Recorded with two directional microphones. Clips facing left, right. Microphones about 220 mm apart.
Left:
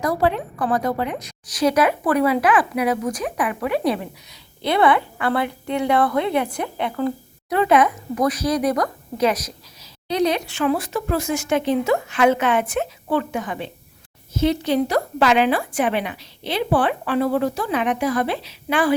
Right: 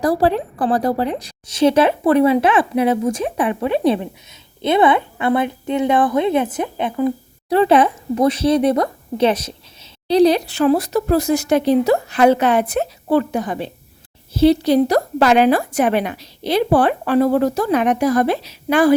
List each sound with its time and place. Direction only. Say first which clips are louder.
0.0 s a woman's voice: right 4 dB; 35° right (ahead or behind); by 7.1 s 20° right (ahead or behind)
7.5 s speech: right 4 dB; 30° right (ahead or behind)